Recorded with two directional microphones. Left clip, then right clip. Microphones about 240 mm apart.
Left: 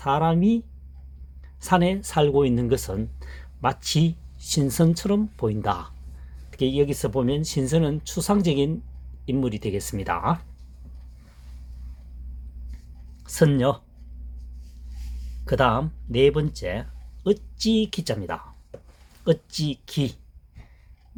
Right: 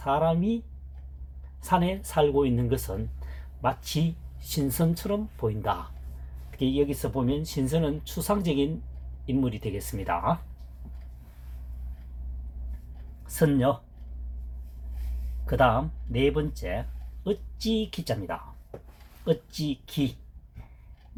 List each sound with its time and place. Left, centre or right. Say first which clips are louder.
0.0 s speech: left 3 dB; left
1.6 s speech: left 4 dB; left
13.3 s speech: left 3 dB; left
15.4 s speech: left 2 dB; left